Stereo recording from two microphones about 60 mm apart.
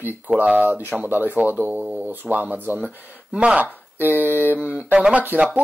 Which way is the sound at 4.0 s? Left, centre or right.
Right.